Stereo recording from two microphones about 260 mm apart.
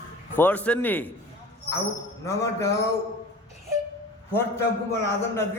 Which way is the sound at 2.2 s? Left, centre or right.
Centre.